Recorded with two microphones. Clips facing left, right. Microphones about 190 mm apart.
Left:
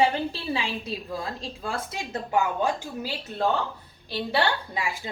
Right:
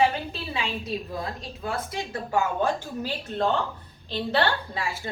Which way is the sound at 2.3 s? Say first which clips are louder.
Even; 10° left (ahead or behind).